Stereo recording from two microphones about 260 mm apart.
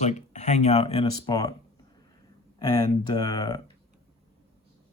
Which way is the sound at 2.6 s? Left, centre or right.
Centre.